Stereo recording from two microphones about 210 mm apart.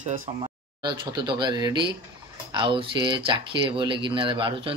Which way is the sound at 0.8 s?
20° right (ahead or behind).